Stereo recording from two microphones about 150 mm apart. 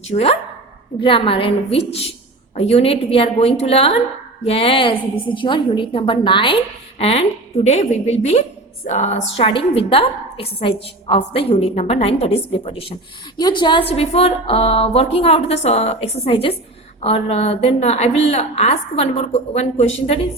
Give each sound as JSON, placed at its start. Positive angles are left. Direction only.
{"t": 0.1, "sound": "a woman's voice", "side_deg": 40}